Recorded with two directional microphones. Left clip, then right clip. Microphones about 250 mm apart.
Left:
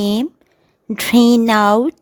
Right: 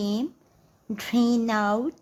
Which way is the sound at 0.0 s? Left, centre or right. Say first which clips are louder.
Left 10 dB; left.